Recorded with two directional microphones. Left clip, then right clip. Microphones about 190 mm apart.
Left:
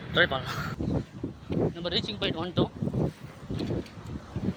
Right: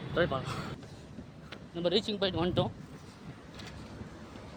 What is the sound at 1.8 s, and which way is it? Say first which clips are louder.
Speech: even; 35° right (ahead or behind).